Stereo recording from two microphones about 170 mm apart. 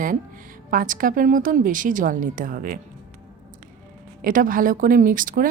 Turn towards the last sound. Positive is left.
turn(degrees=-55)  # may be behind; listen again after turning